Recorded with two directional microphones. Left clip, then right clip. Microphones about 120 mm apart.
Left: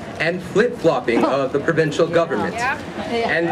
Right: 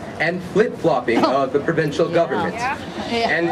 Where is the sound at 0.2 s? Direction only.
50° left (ahead or behind).